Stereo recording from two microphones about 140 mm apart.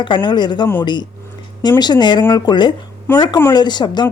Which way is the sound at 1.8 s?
30° left (ahead or behind).